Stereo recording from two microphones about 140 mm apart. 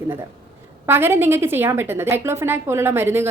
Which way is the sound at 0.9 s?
15° right (ahead or behind).